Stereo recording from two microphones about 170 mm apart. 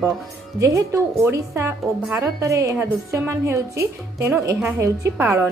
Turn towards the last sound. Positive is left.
turn(degrees=-15)  # may be behind; listen again after turning